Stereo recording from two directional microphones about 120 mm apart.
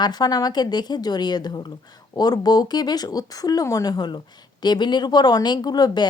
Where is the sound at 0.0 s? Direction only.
35° left (ahead or behind).